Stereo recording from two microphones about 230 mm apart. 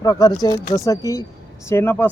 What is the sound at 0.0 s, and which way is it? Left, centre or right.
Speech, centre.